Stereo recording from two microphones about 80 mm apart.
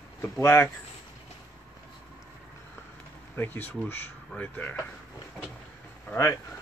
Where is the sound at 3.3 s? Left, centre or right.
Left.